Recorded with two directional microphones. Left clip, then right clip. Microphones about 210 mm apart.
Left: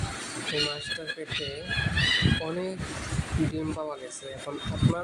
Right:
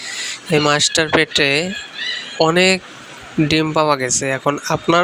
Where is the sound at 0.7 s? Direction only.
45° right (ahead or behind).